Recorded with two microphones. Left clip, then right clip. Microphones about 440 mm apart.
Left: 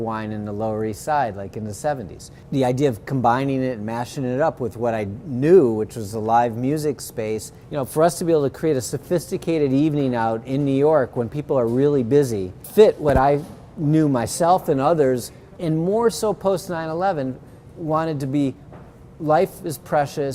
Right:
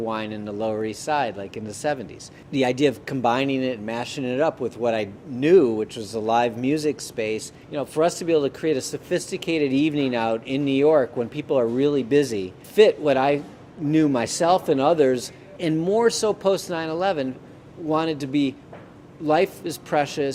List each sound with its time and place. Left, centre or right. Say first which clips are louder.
0.0 s a man's voice: left 1 dB; left